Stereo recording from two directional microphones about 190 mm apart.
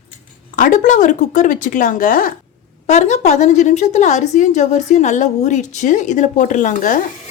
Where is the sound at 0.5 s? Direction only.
45° left (ahead or behind).